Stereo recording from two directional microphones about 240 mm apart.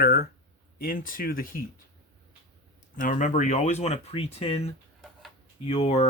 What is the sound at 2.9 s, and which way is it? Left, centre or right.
Speech, left.